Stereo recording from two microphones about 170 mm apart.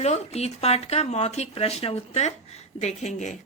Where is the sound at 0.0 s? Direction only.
40° left (ahead or behind).